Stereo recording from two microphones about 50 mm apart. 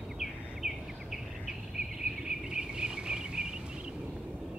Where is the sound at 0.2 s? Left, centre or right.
Centre.